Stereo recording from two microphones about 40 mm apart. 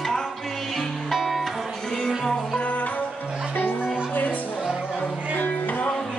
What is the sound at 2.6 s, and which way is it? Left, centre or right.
Music, left.